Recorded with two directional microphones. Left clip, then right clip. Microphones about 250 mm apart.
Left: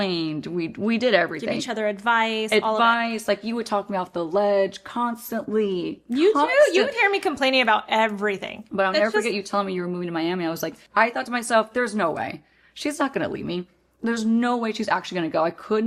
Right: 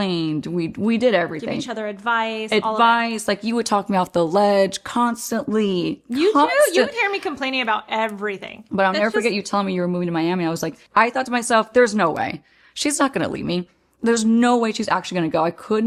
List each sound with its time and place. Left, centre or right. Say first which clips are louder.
0.0 s speech: right 2 dB; right
1.5 s speech: left 1 dB; centre
2.7 s speech: right 3 dB; right
6.1 s speech: right 2 dB; centre
9.2 s speech: right 3 dB; right
12.8 s a woman's voice: right 4 dB; right